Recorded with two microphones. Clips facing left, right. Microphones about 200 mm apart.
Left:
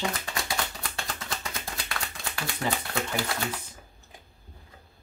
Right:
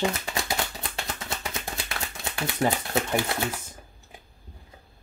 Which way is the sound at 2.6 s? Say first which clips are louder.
Right 6 dB; 35° right (ahead or behind).